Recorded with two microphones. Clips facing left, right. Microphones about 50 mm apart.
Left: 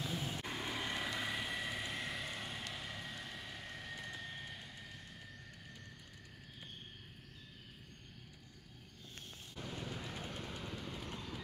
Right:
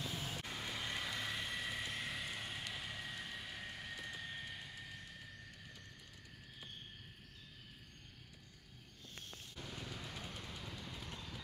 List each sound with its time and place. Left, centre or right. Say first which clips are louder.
0.1 s vehicle: left 3 dB; centre
9.8 s vehicle: left 3 dB; centre